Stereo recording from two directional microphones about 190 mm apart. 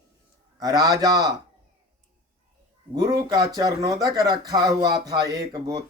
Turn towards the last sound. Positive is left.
turn(degrees=-20)  # may be behind; listen again after turning